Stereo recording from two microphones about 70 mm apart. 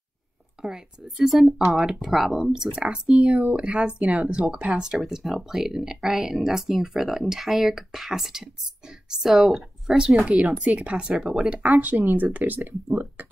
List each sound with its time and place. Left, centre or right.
0.6 s speech: centre